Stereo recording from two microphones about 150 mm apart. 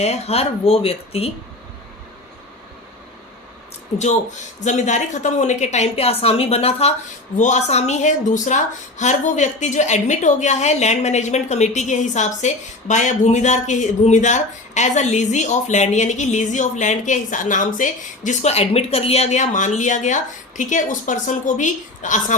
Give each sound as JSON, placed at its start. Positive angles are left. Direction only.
{"t": 0.0, "sound": "speech", "side_deg": 45}
{"t": 4.6, "sound": "speech", "side_deg": 50}
{"t": 7.3, "sound": "speech", "side_deg": 55}